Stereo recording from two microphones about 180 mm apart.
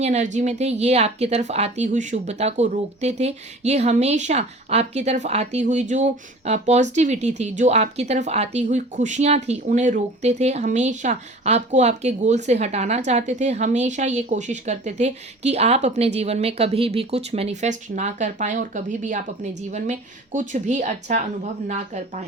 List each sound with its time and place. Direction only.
0.0 s speech: 40° right (ahead or behind)